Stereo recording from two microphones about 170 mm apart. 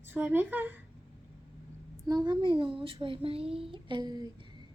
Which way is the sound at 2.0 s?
25° right (ahead or behind).